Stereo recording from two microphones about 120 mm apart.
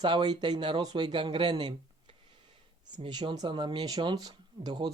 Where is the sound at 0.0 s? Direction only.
40° right (ahead or behind).